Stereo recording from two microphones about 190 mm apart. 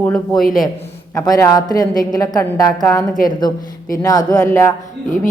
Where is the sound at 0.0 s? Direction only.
5° left (ahead or behind).